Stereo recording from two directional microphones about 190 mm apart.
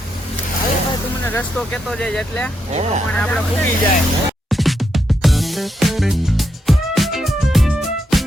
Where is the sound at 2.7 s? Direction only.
35° right (ahead or behind).